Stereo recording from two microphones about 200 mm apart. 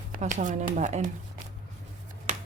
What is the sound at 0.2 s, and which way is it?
Speech, 40° right (ahead or behind).